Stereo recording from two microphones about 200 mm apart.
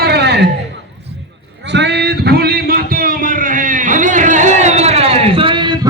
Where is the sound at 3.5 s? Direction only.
40° right (ahead or behind).